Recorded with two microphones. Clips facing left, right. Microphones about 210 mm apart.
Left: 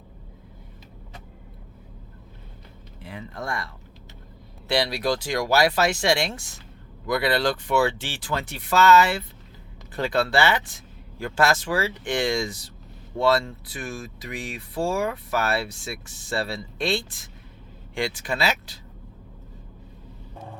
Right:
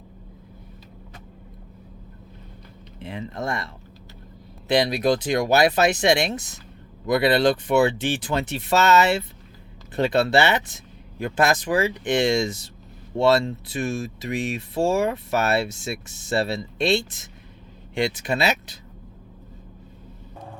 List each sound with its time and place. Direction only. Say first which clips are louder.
3.0 s speech: right 5 dB; 20° right (ahead or behind)
4.7 s speech: right 4 dB; 20° right (ahead or behind)